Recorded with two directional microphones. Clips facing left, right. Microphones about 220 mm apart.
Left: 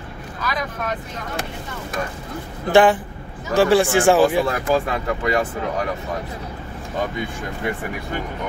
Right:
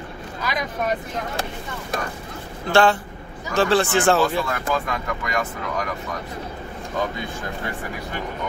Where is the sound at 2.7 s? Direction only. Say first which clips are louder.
Left 3 dB; 15° left (ahead or behind).